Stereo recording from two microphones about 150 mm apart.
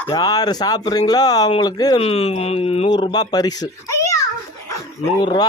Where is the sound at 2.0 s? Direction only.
40° left (ahead or behind).